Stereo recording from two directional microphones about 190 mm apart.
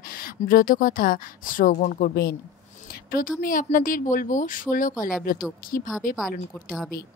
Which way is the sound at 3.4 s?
45° left (ahead or behind).